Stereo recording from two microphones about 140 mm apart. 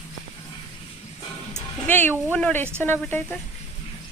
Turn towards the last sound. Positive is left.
turn(degrees=10)  # may be behind; listen again after turning